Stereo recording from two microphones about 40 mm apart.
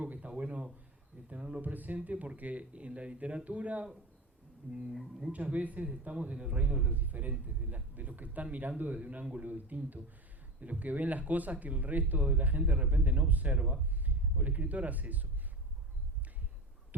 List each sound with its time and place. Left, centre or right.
0.0 s a sound: right
1.3 s a man's voice: right
1.6 s a man's voice: right
5.3 s a man's voice: right
6.9 s speech: right